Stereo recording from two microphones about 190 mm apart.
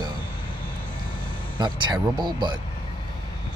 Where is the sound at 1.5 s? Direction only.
25° right (ahead or behind).